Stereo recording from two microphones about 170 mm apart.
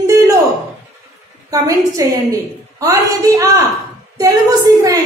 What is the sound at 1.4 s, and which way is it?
A woman's voice, 20° right (ahead or behind).